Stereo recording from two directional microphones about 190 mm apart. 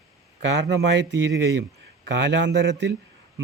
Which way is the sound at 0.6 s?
65° right (ahead or behind).